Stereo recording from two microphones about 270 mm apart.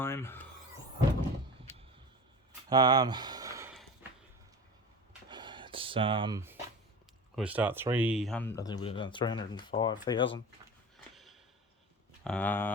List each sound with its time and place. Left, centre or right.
0.0 s filing: centre
2.6 s speech: centre
5.3 s a sound: centre
7.3 s speech: centre
11.1 s a sound: centre
12.2 s speech: centre